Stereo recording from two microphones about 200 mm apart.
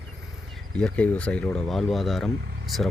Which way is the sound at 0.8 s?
5° left (ahead or behind).